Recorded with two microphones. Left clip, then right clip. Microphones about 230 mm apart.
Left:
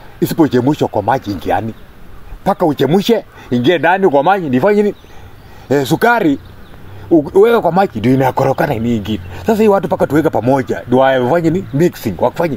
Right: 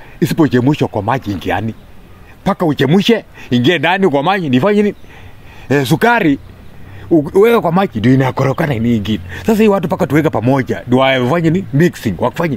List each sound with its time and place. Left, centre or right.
0.2 s speech: right